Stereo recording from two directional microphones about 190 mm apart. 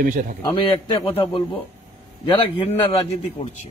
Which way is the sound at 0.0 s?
45° right (ahead or behind).